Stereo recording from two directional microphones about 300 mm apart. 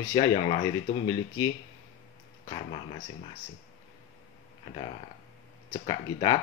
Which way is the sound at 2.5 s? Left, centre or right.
Left.